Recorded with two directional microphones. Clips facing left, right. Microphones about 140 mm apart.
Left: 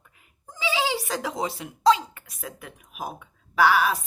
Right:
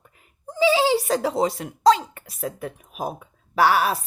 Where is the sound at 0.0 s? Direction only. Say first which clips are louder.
Right 9 dB; 40° right (ahead or behind).